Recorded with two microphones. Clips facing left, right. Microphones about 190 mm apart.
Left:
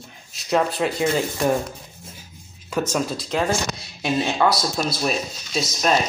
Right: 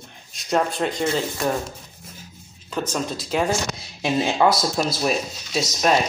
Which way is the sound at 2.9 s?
5° left (ahead or behind).